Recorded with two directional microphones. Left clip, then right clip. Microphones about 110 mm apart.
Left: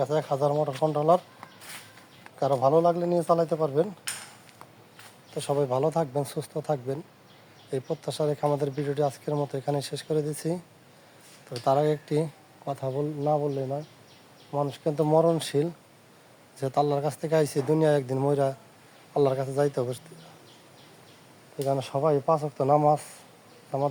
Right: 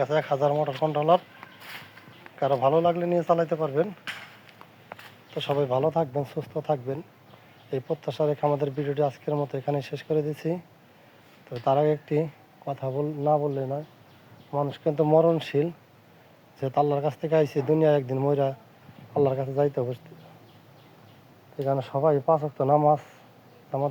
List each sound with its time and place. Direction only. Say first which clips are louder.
0.0 s speech: right 2 dB; 45° left (ahead or behind)
2.9 s speech: right 1 dB; 40° left (ahead or behind)
5.3 s speech: right 1 dB; 20° left (ahead or behind)
13.2 s speech: right 3 dB; 10° left (ahead or behind)
21.6 s speech: right 2 dB; 10° left (ahead or behind)